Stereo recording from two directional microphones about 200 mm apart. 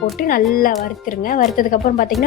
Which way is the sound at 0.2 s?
45° left (ahead or behind).